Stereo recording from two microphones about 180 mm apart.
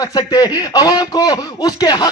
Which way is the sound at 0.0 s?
20° left (ahead or behind).